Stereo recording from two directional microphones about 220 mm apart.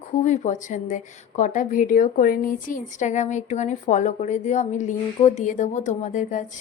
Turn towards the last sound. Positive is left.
turn(degrees=35)  # may be behind; listen again after turning